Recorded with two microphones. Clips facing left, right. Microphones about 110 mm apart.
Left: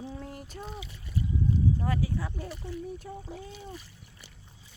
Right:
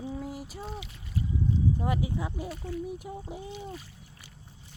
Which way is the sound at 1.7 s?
15° right (ahead or behind).